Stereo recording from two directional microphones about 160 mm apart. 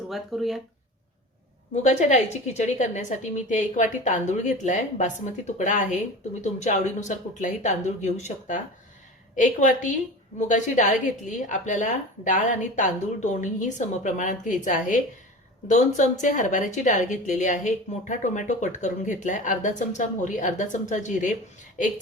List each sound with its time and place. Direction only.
0.1 s speech: centre (ahead or behind)
1.7 s speech: 45° left (ahead or behind)